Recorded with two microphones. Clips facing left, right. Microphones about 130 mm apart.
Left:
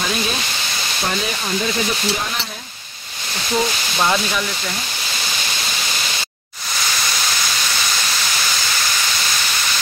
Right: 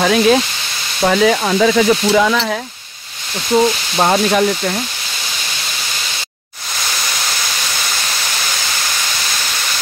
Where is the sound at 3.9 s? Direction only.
40° right (ahead or behind).